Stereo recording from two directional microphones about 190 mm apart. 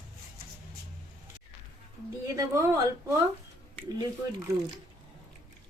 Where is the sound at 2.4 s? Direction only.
15° right (ahead or behind).